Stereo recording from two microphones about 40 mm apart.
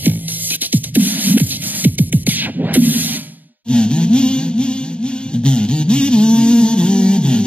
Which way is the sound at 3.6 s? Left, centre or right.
Left.